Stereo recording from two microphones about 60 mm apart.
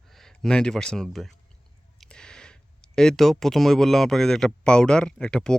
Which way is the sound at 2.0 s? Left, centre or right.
Centre.